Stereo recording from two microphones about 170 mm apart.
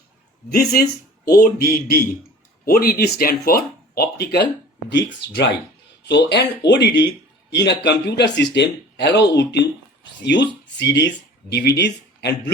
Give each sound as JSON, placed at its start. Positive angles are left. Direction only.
{"t": 0.5, "sound": "speech", "side_deg": 65}
{"t": 4.9, "sound": "speech", "side_deg": 85}